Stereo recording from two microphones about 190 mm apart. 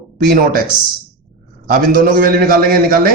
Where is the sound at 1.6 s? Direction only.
50° right (ahead or behind).